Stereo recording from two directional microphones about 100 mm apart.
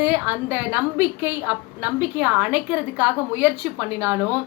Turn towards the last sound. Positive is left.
turn(degrees=-20)  # may be behind; listen again after turning